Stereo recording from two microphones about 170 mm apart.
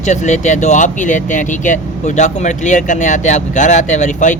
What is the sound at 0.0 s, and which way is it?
Speech, 45° left (ahead or behind).